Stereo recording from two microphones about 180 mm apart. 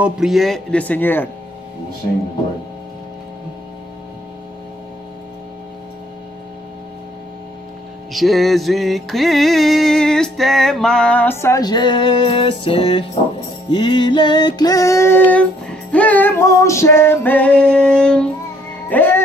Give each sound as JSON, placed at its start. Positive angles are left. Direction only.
{"t": 0.0, "sound": "speech", "side_deg": 0}
{"t": 8.1, "sound": "music", "side_deg": 0}